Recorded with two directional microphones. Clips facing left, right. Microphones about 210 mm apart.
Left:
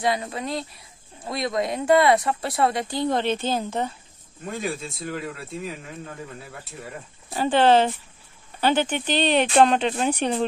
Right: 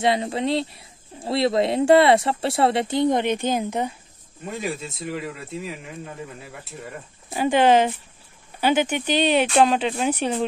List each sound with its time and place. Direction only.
0.0 s speech: 25° right (ahead or behind)
4.5 s speech: centre (ahead or behind)